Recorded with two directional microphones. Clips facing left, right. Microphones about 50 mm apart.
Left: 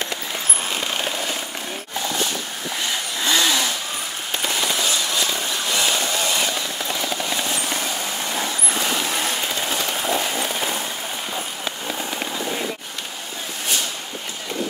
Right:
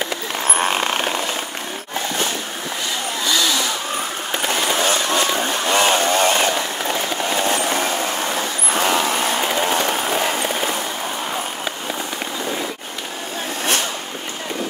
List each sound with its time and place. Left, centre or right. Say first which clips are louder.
0.6 s a sound: right 7 dB; right
3.3 s chainsaw: even; left
4.5 s vehicle: right 4 dB; right